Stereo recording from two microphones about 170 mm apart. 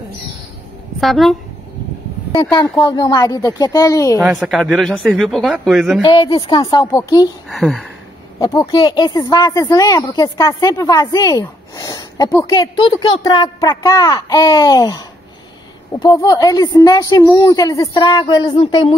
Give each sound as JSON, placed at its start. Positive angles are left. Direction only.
{"t": 1.0, "sound": "speech", "side_deg": 0}
{"t": 2.3, "sound": "speech", "side_deg": 20}
{"t": 4.2, "sound": "speech", "side_deg": -5}
{"t": 6.0, "sound": "speech", "side_deg": 30}
{"t": 7.4, "sound": "speech", "side_deg": 0}
{"t": 8.4, "sound": "speech", "side_deg": 25}